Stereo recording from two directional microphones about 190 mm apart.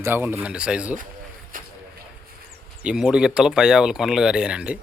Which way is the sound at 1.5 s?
45° right (ahead or behind).